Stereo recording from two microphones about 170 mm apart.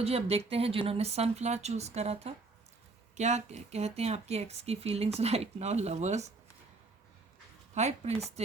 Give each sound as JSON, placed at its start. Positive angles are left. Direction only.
{"t": 0.0, "sound": "speech", "side_deg": -35}
{"t": 7.7, "sound": "speech", "side_deg": -40}